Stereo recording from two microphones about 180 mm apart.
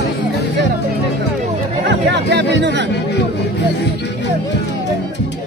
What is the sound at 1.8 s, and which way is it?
Chatter, 70° right (ahead or behind).